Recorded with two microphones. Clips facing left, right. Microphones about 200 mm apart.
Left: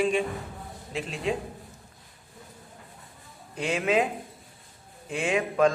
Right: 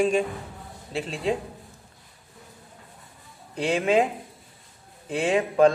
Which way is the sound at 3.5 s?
30° right (ahead or behind).